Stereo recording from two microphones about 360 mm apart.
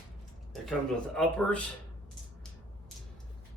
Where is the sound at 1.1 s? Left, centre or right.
Centre.